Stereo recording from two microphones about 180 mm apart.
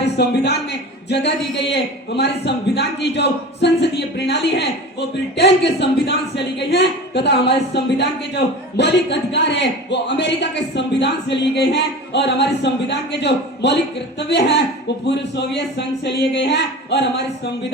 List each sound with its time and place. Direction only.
0.0 s a man's voice: 70° left (ahead or behind)